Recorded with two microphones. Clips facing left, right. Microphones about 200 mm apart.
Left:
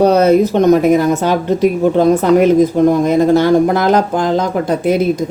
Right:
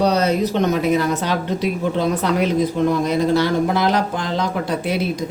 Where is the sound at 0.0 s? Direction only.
50° left (ahead or behind).